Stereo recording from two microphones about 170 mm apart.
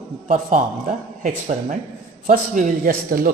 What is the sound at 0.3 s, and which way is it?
Speech, 35° right (ahead or behind).